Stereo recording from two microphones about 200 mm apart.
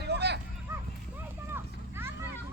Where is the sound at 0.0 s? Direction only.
55° right (ahead or behind).